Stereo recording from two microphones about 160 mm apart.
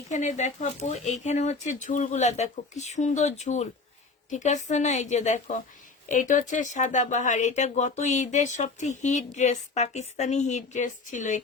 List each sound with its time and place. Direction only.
0.1 s speech: 50° left (ahead or behind)